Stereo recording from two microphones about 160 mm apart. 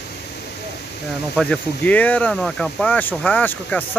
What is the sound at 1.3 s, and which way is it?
Speech, 5° left (ahead or behind).